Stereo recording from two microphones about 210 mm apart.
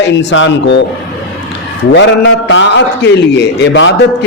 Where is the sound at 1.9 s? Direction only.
65° left (ahead or behind).